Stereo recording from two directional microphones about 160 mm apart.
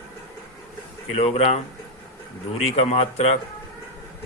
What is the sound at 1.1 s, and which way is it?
Speech, 40° left (ahead or behind).